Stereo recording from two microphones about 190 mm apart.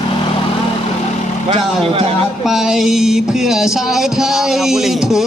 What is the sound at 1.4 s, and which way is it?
Speech, 30° right (ahead or behind).